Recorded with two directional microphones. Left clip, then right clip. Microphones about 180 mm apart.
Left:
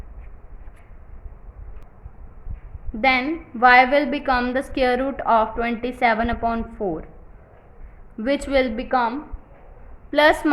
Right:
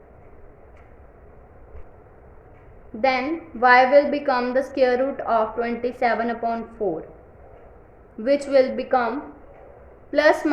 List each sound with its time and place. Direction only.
3.0 s a woman's voice: 30° left (ahead or behind)
8.4 s a woman's voice: 30° left (ahead or behind)
10.1 s a woman's voice: 30° left (ahead or behind)